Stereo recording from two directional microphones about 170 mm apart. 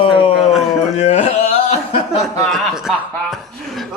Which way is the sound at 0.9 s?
40° left (ahead or behind).